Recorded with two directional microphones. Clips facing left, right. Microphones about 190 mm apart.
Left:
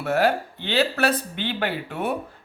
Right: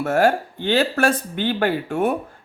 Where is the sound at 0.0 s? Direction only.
50° right (ahead or behind).